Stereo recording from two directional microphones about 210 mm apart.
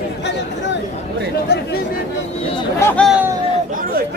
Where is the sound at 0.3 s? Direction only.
55° left (ahead or behind).